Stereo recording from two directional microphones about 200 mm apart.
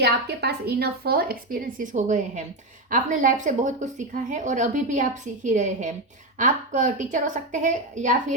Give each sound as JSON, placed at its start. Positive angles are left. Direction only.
{"t": 0.0, "sound": "a woman's voice", "side_deg": -55}